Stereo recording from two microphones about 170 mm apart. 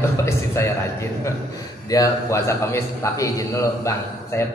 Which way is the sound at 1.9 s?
20° left (ahead or behind).